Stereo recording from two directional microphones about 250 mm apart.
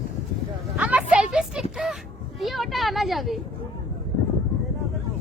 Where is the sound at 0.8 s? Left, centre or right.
Centre.